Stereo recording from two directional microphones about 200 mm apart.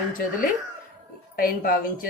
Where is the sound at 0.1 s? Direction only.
45° left (ahead or behind).